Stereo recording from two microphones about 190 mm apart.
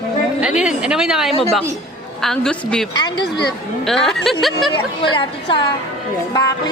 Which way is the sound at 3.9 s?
Centre (ahead or behind).